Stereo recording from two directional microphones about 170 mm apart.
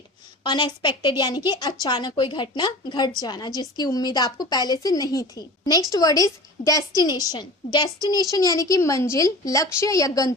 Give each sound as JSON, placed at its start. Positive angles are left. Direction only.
{"t": 0.4, "sound": "a woman's voice", "side_deg": 25}